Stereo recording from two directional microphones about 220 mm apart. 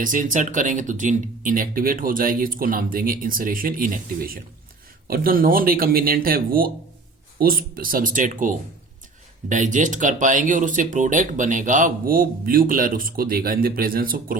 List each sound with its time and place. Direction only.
0.0 s speech: 35° right (ahead or behind)